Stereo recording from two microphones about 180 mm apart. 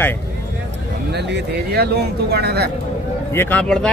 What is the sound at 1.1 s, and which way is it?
Speech, 70° right (ahead or behind).